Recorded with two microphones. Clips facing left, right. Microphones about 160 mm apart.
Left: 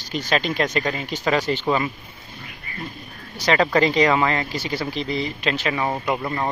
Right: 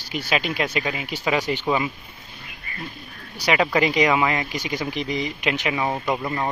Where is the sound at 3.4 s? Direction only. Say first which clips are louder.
Left 2 dB; 10° right (ahead or behind).